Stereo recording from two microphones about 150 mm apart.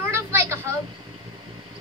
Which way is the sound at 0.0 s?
15° right (ahead or behind).